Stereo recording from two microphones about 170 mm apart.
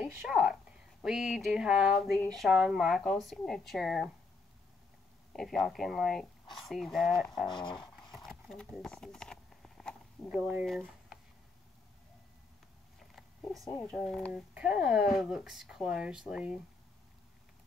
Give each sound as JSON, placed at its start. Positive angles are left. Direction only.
{"t": 0.0, "sound": "speech", "side_deg": -5}
{"t": 5.3, "sound": "speech", "side_deg": 0}
{"t": 7.4, "sound": "speech", "side_deg": 25}
{"t": 8.1, "sound": "horse", "side_deg": 0}
{"t": 10.6, "sound": "speech", "side_deg": 0}
{"t": 13.7, "sound": "speech", "side_deg": 0}